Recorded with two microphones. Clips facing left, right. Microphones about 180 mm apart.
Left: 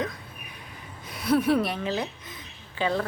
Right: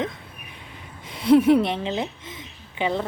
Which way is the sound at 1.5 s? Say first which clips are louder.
Right 4 dB; 25° right (ahead or behind).